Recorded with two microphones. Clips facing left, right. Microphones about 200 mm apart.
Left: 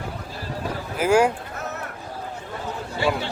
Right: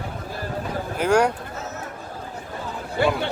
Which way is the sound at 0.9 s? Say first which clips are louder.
Left 1 dB; 5° left (ahead or behind).